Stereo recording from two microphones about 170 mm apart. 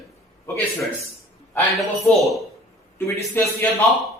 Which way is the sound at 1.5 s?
Centre (ahead or behind).